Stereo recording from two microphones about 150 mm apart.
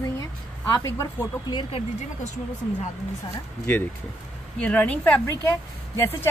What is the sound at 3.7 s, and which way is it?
A woman's voice, 15° left (ahead or behind).